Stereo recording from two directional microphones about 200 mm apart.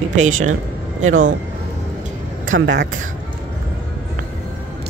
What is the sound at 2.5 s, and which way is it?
Speech, 65° right (ahead or behind).